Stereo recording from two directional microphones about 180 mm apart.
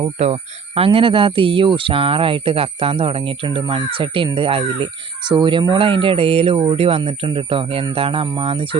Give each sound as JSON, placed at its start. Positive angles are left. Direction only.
{"t": 0.0, "sound": "speech", "side_deg": -35}